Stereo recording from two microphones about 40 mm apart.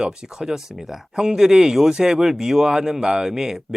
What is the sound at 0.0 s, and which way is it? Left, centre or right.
Speech, centre.